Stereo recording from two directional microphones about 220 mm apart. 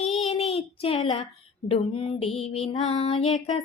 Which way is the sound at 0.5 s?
25° left (ahead or behind).